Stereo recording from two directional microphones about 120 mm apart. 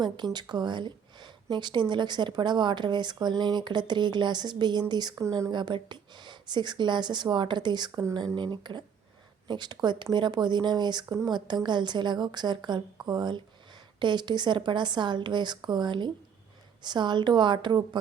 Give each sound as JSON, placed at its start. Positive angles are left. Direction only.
{"t": 0.3, "sound": "speech", "side_deg": -35}
{"t": 5.5, "sound": "speech", "side_deg": -40}